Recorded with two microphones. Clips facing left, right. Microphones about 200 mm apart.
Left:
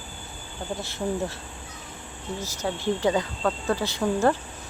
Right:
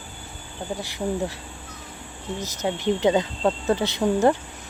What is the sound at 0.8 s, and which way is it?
Speech, 15° right (ahead or behind).